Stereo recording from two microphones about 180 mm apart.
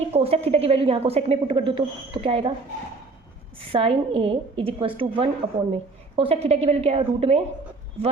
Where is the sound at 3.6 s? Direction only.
30° right (ahead or behind).